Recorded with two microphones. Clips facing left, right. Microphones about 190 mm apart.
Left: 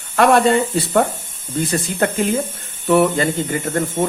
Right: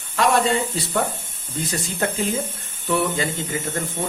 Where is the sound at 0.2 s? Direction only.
60° left (ahead or behind).